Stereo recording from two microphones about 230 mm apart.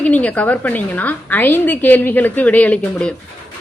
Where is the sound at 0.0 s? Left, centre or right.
Centre.